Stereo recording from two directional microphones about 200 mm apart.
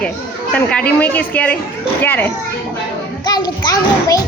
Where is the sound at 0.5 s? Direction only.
5° left (ahead or behind).